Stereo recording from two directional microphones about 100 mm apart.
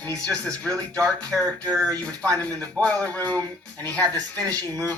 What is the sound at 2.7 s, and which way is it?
Speech, 15° left (ahead or behind).